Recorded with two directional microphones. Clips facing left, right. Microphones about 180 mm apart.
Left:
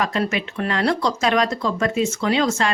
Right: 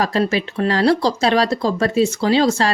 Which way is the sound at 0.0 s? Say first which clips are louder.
Right 4 dB; 35° right (ahead or behind).